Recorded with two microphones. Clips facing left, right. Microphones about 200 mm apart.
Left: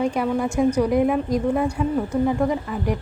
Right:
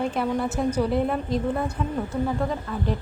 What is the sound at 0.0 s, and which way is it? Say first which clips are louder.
A woman's voice: left 3 dB; 10° left (ahead or behind).